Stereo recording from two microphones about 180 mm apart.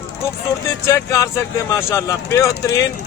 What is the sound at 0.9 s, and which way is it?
Speech, 15° left (ahead or behind).